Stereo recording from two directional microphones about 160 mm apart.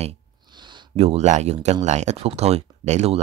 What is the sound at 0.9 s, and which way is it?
Speech, 40° right (ahead or behind).